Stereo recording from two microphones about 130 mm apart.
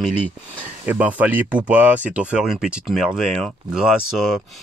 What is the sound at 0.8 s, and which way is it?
Speech, 10° right (ahead or behind).